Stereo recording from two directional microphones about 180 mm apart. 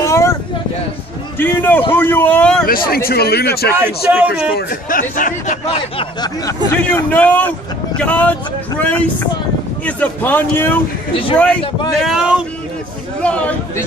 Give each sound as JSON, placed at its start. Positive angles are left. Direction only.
{"t": 0.0, "sound": "a sound", "side_deg": 15}
{"t": 1.4, "sound": "a man's voice", "side_deg": 10}
{"t": 2.6, "sound": "a man's voice", "side_deg": 55}
{"t": 3.8, "sound": "a man's voice", "side_deg": -10}
{"t": 4.6, "sound": "speech", "side_deg": 50}
{"t": 5.9, "sound": "a sound", "side_deg": 20}
{"t": 6.7, "sound": "a man's voice", "side_deg": 10}
{"t": 12.1, "sound": "speech", "side_deg": -5}
{"t": 13.2, "sound": "a man's voice", "side_deg": 5}